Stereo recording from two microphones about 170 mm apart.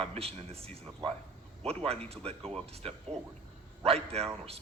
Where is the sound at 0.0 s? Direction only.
35° right (ahead or behind).